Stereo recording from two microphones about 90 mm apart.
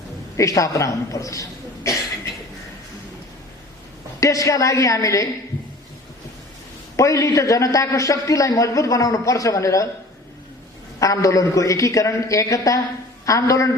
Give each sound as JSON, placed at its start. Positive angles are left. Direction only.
{"t": 0.3, "sound": "a man's voice", "side_deg": 35}
{"t": 4.2, "sound": "a man's voice", "side_deg": 40}
{"t": 6.9, "sound": "a man's voice", "side_deg": 35}
{"t": 11.0, "sound": "a man's voice", "side_deg": 40}